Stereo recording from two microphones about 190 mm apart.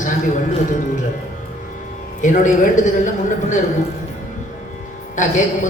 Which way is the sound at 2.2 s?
40° left (ahead or behind).